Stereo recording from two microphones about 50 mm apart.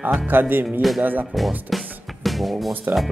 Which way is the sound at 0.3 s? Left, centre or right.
Right.